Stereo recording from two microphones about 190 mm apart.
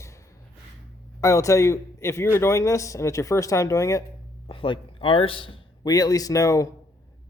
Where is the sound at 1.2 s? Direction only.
15° left (ahead or behind).